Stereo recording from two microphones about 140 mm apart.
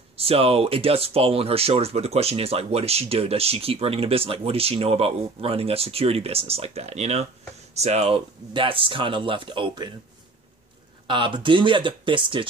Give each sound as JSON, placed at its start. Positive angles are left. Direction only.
{"t": 0.2, "sound": "speech", "side_deg": -45}
{"t": 11.1, "sound": "speech", "side_deg": -35}